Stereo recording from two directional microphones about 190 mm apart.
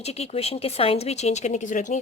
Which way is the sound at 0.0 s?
30° left (ahead or behind).